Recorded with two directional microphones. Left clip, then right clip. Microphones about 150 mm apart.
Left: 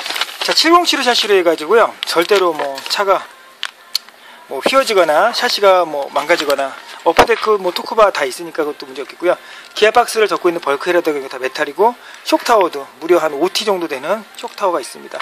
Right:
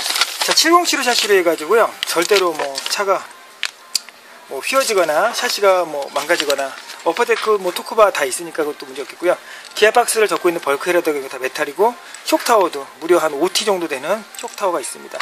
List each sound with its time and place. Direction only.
0.4 s speech: 15° left (ahead or behind)
4.5 s speech: 25° left (ahead or behind)